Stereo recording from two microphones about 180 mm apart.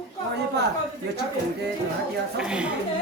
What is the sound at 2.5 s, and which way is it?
Speech, 5° right (ahead or behind).